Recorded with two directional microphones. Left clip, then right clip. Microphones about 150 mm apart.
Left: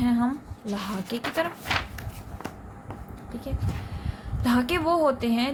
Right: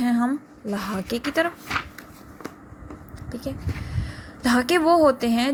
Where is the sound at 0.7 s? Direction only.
40° right (ahead or behind).